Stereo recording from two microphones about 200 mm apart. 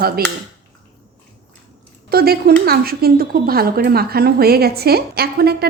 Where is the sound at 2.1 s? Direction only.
50° right (ahead or behind).